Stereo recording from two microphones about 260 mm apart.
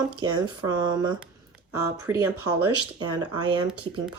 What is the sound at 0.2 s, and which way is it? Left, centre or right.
Speech, centre.